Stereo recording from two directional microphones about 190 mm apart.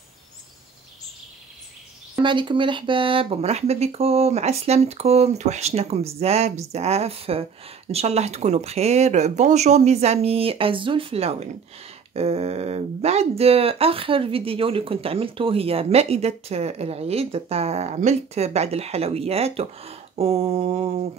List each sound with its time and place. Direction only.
2.2 s speech: 25° right (ahead or behind)